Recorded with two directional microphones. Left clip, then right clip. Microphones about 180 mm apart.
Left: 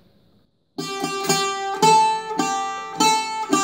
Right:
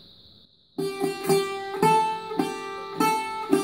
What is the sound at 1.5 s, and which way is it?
Music, 20° left (ahead or behind).